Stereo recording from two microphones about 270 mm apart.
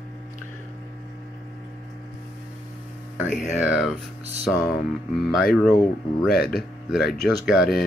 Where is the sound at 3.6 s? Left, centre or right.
Centre.